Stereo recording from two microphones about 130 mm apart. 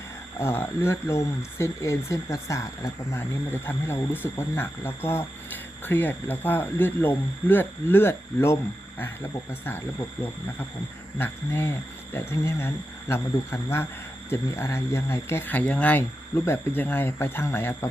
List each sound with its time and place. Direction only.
0.3 s speech: 20° left (ahead or behind)
11.2 s speech: 15° left (ahead or behind)